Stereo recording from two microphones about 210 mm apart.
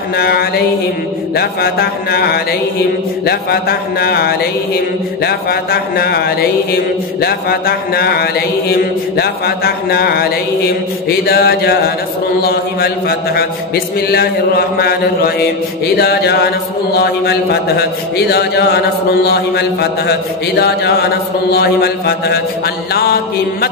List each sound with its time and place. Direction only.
0.2 s mantra: 45° left (ahead or behind)